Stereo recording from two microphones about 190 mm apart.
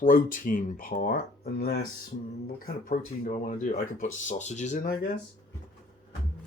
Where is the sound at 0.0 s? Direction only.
45° left (ahead or behind).